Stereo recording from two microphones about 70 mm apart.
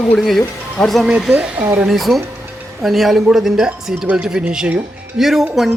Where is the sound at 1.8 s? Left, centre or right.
Centre.